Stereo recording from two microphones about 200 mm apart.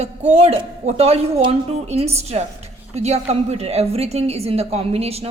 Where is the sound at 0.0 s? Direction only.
35° right (ahead or behind).